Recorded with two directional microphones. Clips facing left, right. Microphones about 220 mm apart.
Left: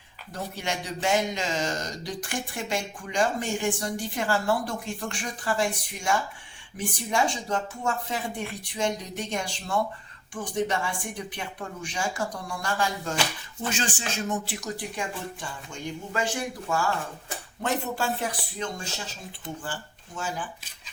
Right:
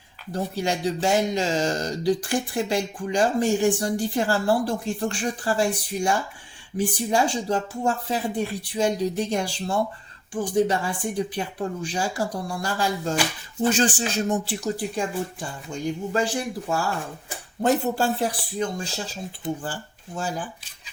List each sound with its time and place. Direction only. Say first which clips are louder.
0.3 s speech: right 6 dB; 35° right (ahead or behind)